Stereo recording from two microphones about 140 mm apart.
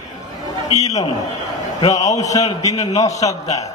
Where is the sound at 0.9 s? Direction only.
25° left (ahead or behind).